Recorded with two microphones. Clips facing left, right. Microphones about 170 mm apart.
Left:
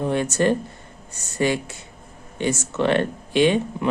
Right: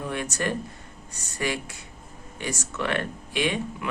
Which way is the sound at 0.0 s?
30° left (ahead or behind).